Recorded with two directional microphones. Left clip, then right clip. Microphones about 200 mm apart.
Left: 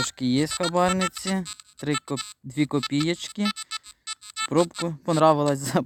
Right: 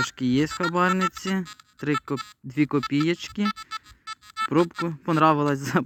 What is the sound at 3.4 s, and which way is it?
Speech, 25° right (ahead or behind).